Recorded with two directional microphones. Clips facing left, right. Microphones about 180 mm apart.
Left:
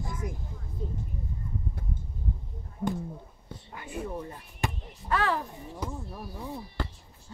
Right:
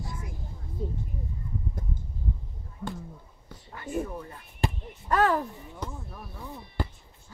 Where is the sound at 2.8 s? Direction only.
35° left (ahead or behind).